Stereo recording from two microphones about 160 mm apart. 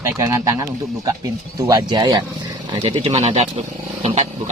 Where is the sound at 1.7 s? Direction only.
25° right (ahead or behind).